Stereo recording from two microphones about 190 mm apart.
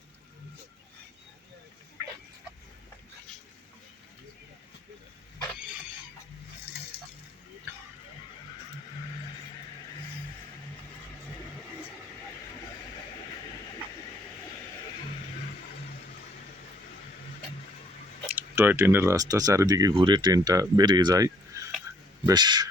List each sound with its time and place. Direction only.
18.3 s a man's voice: 10° right (ahead or behind)